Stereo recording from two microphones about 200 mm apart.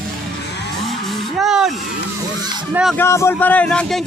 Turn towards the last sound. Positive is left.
turn(degrees=0)  # may be behind; listen again after turning